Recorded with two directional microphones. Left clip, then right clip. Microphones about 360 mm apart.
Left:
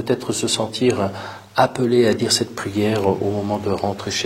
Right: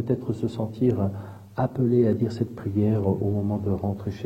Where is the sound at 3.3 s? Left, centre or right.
Centre.